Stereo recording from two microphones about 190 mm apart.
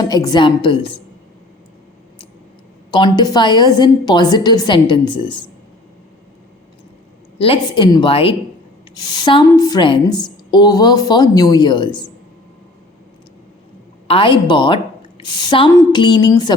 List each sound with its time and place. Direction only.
0.0 s a woman's voice: 20° left (ahead or behind)
2.9 s a woman's voice: 25° left (ahead or behind)
7.3 s a woman's voice: 30° left (ahead or behind)
14.1 s a woman's voice: 25° left (ahead or behind)